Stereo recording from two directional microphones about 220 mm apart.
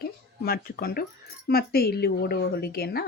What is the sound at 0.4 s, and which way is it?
A woman's voice, 45° left (ahead or behind).